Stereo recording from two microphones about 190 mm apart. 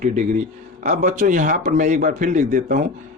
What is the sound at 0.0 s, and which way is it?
Speech, 40° right (ahead or behind).